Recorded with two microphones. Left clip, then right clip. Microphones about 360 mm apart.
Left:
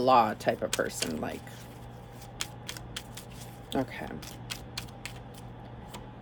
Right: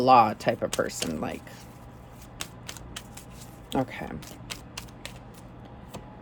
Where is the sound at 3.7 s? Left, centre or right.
Centre.